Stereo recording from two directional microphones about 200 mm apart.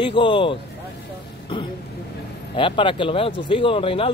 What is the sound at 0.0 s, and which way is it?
Speech, 25° left (ahead or behind).